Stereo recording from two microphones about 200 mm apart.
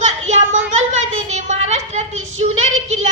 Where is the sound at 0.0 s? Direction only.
35° right (ahead or behind).